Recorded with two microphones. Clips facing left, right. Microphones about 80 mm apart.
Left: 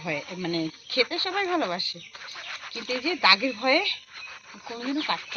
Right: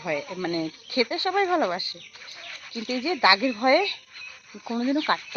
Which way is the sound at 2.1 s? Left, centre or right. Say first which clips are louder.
Left 6 dB; left.